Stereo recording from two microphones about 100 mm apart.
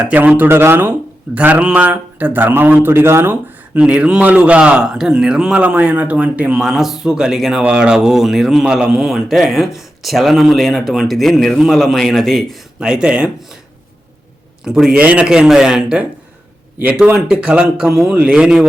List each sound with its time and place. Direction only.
0.0 s a man's voice: 15° right (ahead or behind)
3.8 s a man's voice: 15° right (ahead or behind)
14.6 s speech: 5° right (ahead or behind)